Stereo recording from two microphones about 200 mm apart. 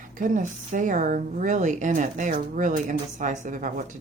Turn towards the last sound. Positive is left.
turn(degrees=-40)  # may be behind; listen again after turning